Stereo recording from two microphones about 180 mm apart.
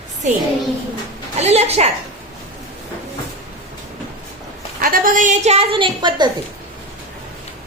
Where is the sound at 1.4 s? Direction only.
35° right (ahead or behind).